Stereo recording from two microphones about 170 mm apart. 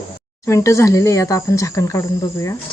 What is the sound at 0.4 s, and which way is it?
Speech, 15° left (ahead or behind).